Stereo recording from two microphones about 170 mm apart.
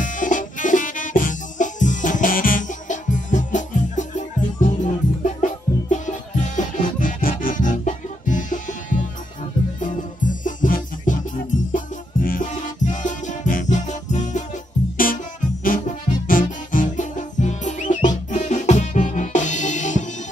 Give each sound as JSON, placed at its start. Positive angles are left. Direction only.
{"t": 0.0, "sound": "music", "side_deg": 50}
{"t": 9.8, "sound": "music", "side_deg": 50}
{"t": 15.6, "sound": "music", "side_deg": 55}